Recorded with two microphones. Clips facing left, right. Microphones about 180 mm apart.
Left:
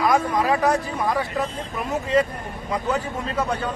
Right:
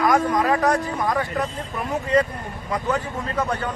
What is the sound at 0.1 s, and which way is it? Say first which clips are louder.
Speech: right 1 dB; 10° left (ahead or behind).